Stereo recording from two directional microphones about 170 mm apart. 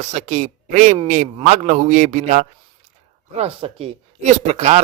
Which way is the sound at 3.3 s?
35° right (ahead or behind).